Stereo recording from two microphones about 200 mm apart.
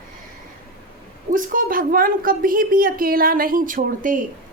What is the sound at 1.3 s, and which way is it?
A woman's voice, 40° right (ahead or behind).